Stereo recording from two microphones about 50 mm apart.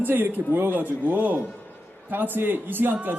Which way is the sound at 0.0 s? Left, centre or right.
Right.